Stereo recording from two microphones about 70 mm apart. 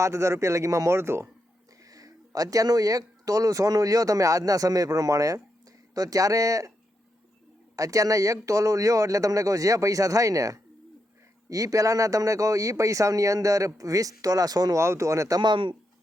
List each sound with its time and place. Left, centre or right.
0.0 s speech: right
1.8 s speech: right
7.8 s speech: right
14.8 s speech: right